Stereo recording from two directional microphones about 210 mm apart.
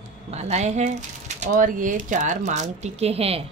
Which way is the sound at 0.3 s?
30° right (ahead or behind).